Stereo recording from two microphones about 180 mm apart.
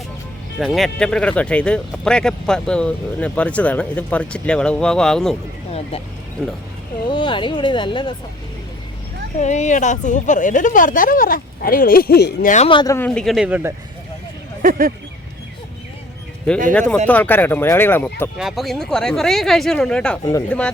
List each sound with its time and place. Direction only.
0.6 s speech: centre (ahead or behind)
6.4 s speech: 5° left (ahead or behind)
7.1 s speech: 25° left (ahead or behind)
9.4 s a woman's voice: 40° left (ahead or behind)
12.6 s speech: 25° left (ahead or behind); by 13.7 s 10° right (ahead or behind)
14.6 s speech: 50° right (ahead or behind)
17.1 s speech: 10° left (ahead or behind)
18.3 s speech: centre (ahead or behind)